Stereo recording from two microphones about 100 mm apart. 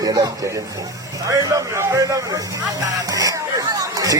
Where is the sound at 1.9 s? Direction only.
35° right (ahead or behind).